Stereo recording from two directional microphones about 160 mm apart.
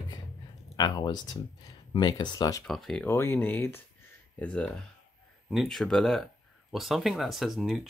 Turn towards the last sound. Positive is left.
turn(degrees=0)  # may be behind; listen again after turning